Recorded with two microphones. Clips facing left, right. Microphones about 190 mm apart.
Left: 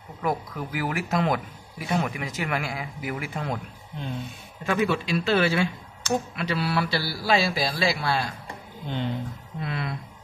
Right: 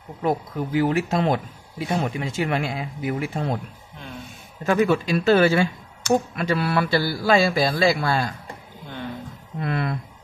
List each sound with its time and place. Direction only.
0.7 s speech: 25° right (ahead or behind)
4.6 s a man's voice: 40° right (ahead or behind)
8.8 s speech: 20° left (ahead or behind)
9.6 s a man's voice: 50° right (ahead or behind)